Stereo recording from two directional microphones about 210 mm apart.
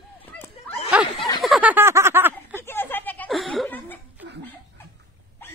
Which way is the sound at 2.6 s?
10° left (ahead or behind).